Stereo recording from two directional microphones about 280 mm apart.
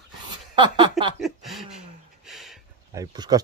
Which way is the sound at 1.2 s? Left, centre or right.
Centre.